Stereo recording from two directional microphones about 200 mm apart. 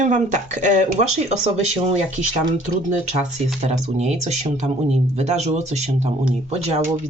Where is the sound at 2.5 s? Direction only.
35° right (ahead or behind).